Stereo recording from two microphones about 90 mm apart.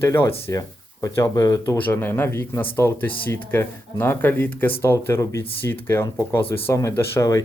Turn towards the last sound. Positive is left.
turn(degrees=35)  # may be behind; listen again after turning